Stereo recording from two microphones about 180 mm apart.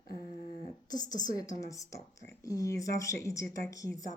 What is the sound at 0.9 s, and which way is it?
A woman's voice, 20° left (ahead or behind).